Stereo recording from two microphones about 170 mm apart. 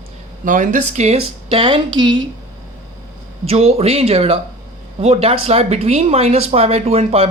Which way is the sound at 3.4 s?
35° right (ahead or behind).